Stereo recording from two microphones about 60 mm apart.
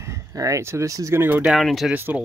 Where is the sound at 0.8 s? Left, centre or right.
Right.